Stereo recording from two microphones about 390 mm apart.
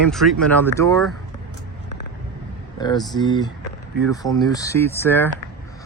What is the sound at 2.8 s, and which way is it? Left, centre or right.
Speech, centre.